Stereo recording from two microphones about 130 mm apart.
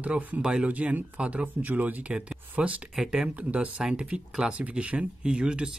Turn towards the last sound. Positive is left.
turn(degrees=-10)  # may be behind; listen again after turning